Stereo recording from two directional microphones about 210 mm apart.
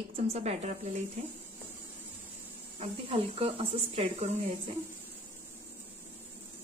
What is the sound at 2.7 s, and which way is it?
Speech, 25° right (ahead or behind).